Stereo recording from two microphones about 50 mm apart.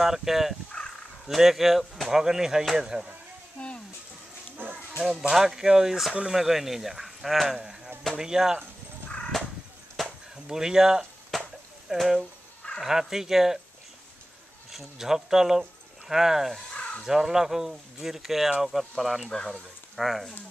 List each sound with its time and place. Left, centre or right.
0.0 s speech: centre
3.6 s a sound: left
4.6 s dog: right
5.3 s speech: centre
9.3 s a sound: centre
10.0 s chop: centre
10.3 s speech: centre
11.3 s chop: centre
11.9 s speech: centre
14.7 s speech: centre
19.3 s speech: centre
20.0 s speech: centre